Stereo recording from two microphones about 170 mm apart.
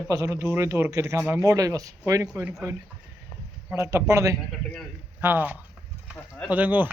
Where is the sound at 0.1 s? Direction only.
15° right (ahead or behind).